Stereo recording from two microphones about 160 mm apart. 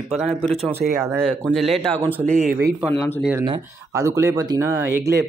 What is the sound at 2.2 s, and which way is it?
Speech, 50° right (ahead or behind).